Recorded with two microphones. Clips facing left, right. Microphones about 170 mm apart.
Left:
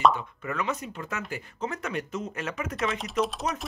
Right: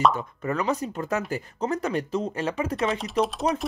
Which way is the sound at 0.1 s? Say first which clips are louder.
Right 4 dB; 35° right (ahead or behind).